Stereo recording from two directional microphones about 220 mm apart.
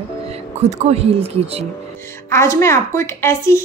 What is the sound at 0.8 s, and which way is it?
Speech, 30° right (ahead or behind).